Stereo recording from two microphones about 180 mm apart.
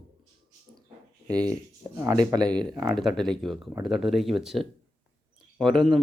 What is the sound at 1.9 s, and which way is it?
Speech, 20° right (ahead or behind).